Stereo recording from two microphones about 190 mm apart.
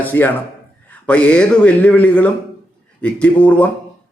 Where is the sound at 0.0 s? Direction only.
10° left (ahead or behind).